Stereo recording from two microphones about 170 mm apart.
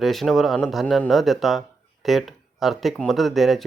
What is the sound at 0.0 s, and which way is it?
Speech, centre (ahead or behind).